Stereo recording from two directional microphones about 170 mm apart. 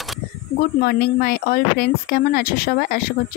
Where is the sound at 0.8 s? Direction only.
65° left (ahead or behind).